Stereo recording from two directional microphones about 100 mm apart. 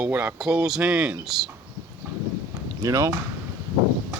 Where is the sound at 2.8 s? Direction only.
35° right (ahead or behind).